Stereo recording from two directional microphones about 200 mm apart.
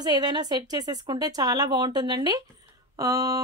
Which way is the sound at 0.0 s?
20° right (ahead or behind).